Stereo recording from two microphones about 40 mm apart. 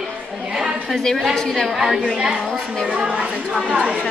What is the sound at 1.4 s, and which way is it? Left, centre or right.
A woman's voice, centre.